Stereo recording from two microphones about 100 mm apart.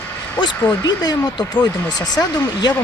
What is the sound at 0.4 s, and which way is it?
Speech, 45° left (ahead or behind).